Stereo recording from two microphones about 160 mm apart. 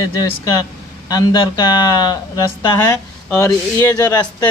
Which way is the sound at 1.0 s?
25° left (ahead or behind).